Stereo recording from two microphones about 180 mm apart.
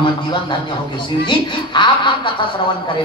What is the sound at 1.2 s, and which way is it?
A man's voice, 25° left (ahead or behind).